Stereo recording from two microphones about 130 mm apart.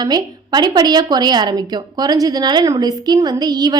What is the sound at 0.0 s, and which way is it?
A woman's voice, 30° right (ahead or behind).